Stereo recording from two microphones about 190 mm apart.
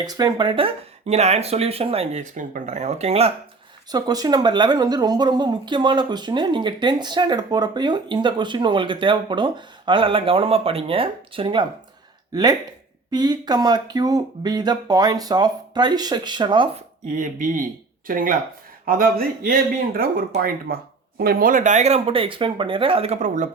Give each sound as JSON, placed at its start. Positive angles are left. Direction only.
{"t": 0.0, "sound": "speech", "side_deg": -20}
{"t": 3.9, "sound": "speech", "side_deg": -20}
{"t": 17.1, "sound": "speech", "side_deg": -40}